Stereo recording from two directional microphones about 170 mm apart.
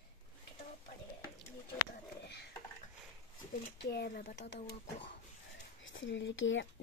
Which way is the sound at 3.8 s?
70° left (ahead or behind).